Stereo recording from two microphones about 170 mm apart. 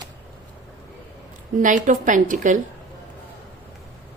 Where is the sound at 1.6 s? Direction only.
50° right (ahead or behind).